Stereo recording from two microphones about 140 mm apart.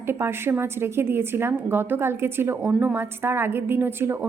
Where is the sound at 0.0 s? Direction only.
15° right (ahead or behind).